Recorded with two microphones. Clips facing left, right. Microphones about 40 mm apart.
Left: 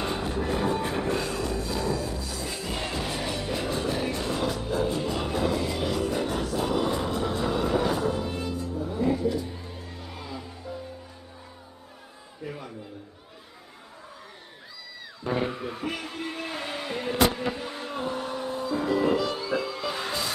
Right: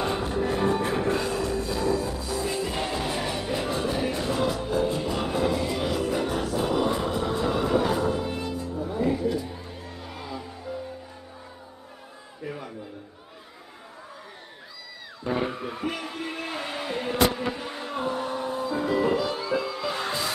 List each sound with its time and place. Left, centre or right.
0.0 s music: centre
12.4 s a sound: centre
15.5 s music: centre
17.3 s vehicle: centre
18.5 s music: centre
19.3 s music: centre